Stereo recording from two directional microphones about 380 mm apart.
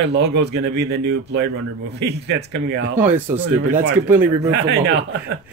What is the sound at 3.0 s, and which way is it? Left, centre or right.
Speech, centre.